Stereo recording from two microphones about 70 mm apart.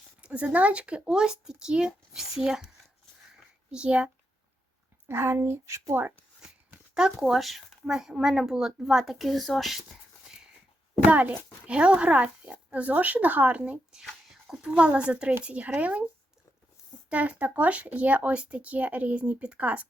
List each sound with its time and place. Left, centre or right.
0.2 s speech: centre
3.7 s speech: centre
5.0 s speech: right
5.9 s speech: right
6.9 s speech: centre
10.2 s dog: centre
11.0 s speech: right
14.0 s speech: centre
17.1 s speech: centre